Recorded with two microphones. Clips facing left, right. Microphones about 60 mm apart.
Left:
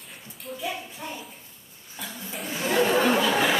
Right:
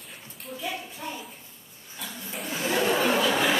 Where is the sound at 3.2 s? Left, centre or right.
Centre.